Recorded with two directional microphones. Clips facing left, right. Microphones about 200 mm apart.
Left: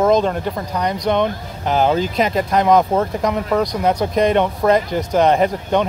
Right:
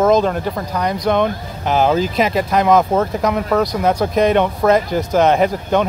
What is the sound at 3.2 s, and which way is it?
Speech, 15° left (ahead or behind).